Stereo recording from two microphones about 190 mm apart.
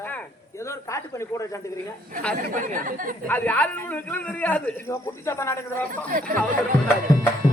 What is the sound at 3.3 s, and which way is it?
A man's voice, 10° left (ahead or behind).